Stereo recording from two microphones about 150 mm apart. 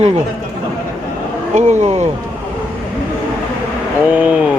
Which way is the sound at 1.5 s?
50° right (ahead or behind).